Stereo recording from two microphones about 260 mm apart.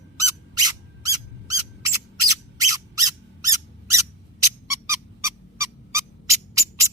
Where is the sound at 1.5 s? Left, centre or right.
Centre.